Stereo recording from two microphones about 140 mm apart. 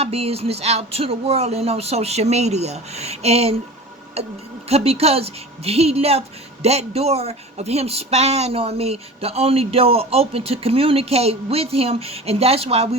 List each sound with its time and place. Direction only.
0.0 s speech: 45° right (ahead or behind)
4.7 s speech: 45° right (ahead or behind)